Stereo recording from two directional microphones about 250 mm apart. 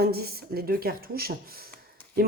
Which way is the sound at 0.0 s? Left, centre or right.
Right.